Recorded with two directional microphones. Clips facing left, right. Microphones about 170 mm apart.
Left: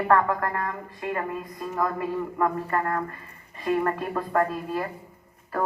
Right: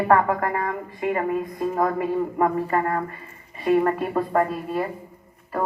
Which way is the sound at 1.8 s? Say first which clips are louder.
Right 3 dB; 20° right (ahead or behind).